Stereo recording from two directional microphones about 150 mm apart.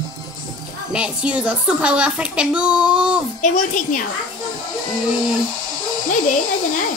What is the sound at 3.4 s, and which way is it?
Speech, 60° left (ahead or behind).